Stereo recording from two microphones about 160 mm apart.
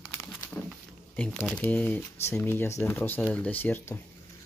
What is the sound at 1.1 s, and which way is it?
Speech, 5° left (ahead or behind).